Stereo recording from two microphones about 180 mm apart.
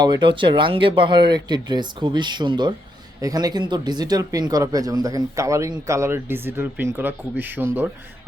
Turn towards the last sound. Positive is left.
turn(degrees=-10)  # may be behind; listen again after turning